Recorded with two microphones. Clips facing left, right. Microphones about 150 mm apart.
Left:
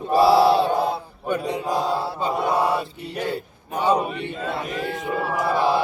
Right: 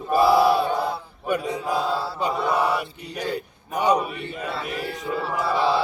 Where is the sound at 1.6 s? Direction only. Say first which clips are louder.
Left 1 dB; 15° left (ahead or behind).